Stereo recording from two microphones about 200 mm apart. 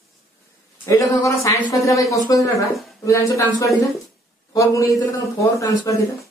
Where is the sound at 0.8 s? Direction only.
15° left (ahead or behind).